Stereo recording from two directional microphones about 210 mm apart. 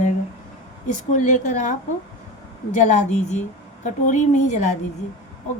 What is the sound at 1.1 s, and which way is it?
Speech, 35° left (ahead or behind).